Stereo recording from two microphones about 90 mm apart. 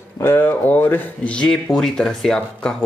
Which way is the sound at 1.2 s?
10° left (ahead or behind).